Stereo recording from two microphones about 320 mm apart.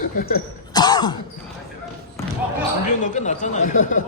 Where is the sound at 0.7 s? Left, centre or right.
Centre.